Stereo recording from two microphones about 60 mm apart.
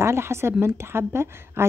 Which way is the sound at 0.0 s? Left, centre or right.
Right.